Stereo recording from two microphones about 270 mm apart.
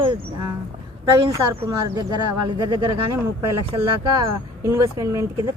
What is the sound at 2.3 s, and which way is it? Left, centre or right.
Speech, right.